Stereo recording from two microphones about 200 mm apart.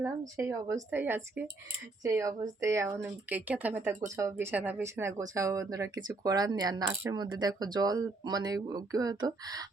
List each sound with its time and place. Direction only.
0.0 s speech: 15° right (ahead or behind)